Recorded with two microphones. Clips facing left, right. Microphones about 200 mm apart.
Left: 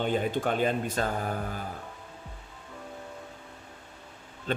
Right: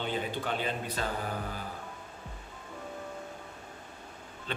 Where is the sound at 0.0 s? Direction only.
50° left (ahead or behind).